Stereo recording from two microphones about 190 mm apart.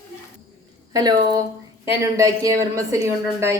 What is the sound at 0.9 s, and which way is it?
A woman's voice, 20° right (ahead or behind).